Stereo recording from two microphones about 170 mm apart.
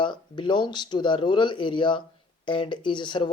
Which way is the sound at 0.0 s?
30° left (ahead or behind).